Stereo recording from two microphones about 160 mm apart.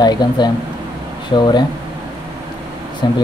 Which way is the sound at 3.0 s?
25° left (ahead or behind).